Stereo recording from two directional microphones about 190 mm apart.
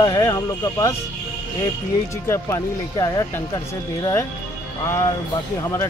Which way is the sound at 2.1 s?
15° left (ahead or behind).